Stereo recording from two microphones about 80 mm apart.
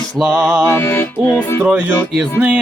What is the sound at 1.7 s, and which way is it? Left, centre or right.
Speech, centre.